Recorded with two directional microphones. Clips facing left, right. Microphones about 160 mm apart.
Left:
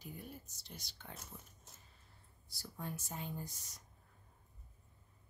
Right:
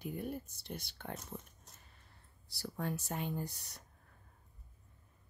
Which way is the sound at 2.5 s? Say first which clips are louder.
Right 7 dB; 75° right (ahead or behind).